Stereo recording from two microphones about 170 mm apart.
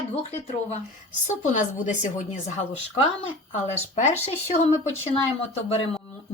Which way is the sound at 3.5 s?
40° left (ahead or behind).